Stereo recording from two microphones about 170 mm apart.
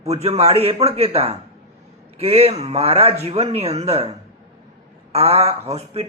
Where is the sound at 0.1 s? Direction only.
40° right (ahead or behind).